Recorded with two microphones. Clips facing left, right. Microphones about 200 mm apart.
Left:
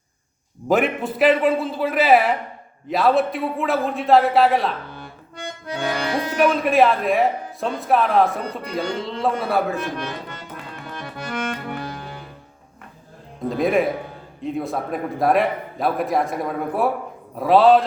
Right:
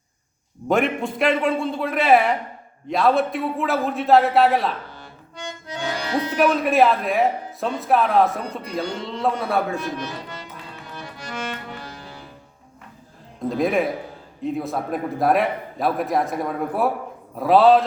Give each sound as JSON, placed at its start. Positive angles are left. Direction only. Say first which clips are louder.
{"t": 0.7, "sound": "a man's voice", "louder": "left 1 dB", "side_deg": 5}
{"t": 4.9, "sound": "accordion", "louder": "left 2 dB", "side_deg": 55}
{"t": 6.3, "sound": "a man's voice", "louder": "left 1 dB", "side_deg": 0}
{"t": 10.0, "sound": "music", "louder": "left 1 dB", "side_deg": 55}
{"t": 13.6, "sound": "a man's voice", "louder": "left 2 dB", "side_deg": 0}